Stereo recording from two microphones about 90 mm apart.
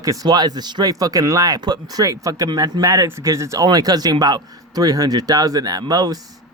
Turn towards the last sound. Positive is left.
turn(degrees=-45)  # may be behind; listen again after turning